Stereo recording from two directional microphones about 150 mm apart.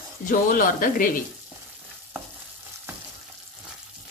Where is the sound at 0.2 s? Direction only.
65° left (ahead or behind).